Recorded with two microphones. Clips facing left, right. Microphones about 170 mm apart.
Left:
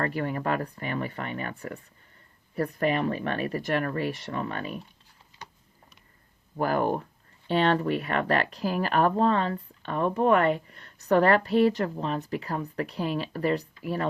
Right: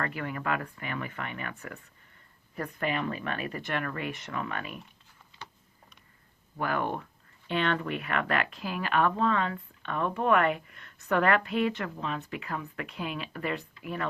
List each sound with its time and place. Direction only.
0.0 s speech: 40° left (ahead or behind)
6.6 s speech: 40° left (ahead or behind)